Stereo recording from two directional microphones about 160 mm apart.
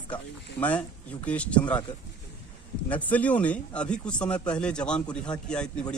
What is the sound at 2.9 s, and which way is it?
A man's voice, 10° left (ahead or behind).